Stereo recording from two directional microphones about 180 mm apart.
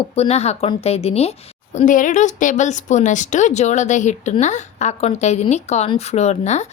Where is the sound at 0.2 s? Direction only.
35° left (ahead or behind).